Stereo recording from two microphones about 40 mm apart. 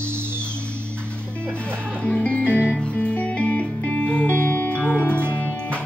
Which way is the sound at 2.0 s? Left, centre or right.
Left.